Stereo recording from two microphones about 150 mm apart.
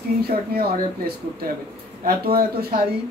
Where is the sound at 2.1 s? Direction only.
85° right.